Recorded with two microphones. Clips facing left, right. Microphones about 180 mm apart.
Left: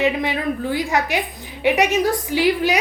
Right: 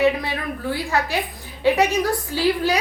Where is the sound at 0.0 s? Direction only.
20° left (ahead or behind).